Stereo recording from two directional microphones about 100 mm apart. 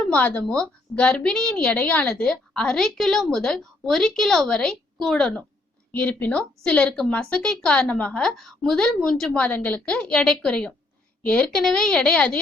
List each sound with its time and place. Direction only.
0.1 s a woman's voice: 15° left (ahead or behind)
5.9 s a woman's voice: 20° left (ahead or behind)